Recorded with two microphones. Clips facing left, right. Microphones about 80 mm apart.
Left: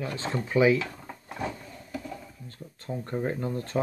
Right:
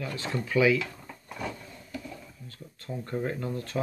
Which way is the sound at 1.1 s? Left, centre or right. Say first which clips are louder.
Left 3 dB; left.